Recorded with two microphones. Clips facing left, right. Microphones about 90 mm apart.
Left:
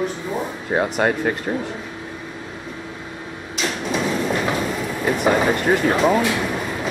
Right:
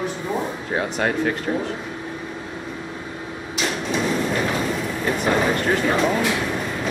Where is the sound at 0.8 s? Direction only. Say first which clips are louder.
Left 3 dB; 10° left (ahead or behind).